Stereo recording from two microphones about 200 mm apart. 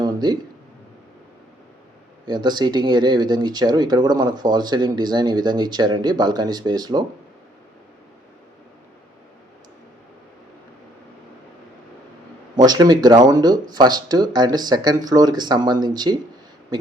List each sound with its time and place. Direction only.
0.0 s a sound: 20° right (ahead or behind)
2.2 s speech: 20° right (ahead or behind)
12.5 s speech: 20° right (ahead or behind)